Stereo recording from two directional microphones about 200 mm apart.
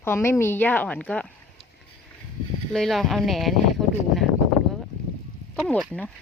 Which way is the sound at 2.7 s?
Centre (ahead or behind).